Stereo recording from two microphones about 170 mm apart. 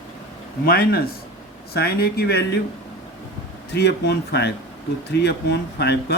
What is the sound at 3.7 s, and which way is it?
Speech, 80° left.